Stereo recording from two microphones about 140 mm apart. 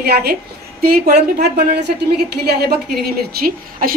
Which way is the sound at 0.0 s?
90° right.